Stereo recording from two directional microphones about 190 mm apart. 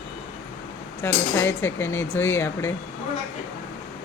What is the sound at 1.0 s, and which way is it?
Speech, 10° left (ahead or behind).